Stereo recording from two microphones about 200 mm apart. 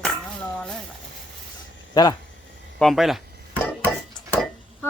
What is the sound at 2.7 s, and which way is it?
Dishes, centre (ahead or behind).